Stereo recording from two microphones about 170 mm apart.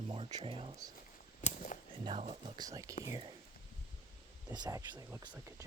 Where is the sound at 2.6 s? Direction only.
20° right (ahead or behind).